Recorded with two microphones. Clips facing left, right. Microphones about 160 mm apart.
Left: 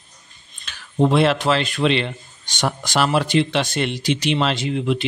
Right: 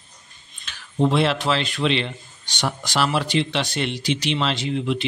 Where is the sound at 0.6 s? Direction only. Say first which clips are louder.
Left 2 dB; 50° left (ahead or behind).